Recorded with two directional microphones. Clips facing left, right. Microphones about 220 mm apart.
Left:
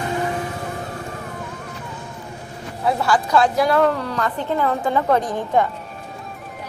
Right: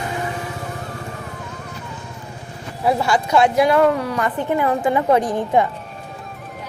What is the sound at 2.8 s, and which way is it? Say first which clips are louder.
Speech: right 1 dB; 20° right (ahead or behind).